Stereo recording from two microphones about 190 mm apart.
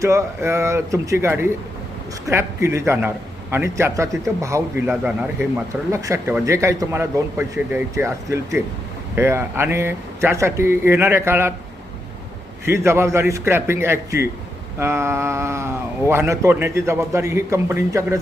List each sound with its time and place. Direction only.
0.0 s a man's voice: 15° right (ahead or behind)
12.6 s a man's voice: 15° right (ahead or behind)